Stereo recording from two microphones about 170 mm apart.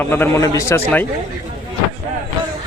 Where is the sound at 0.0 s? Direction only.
10° left (ahead or behind).